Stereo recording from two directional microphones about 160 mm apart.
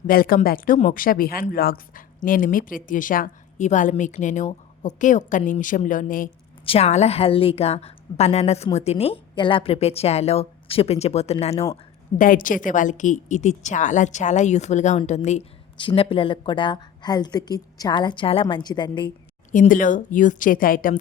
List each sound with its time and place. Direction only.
0.1 s a woman's voice: 65° left (ahead or behind)
6.7 s a woman's voice: 40° left (ahead or behind)
12.1 s a woman's voice: 55° left (ahead or behind)
15.8 s a woman's voice: 35° left (ahead or behind)
19.5 s speech: 55° left (ahead or behind)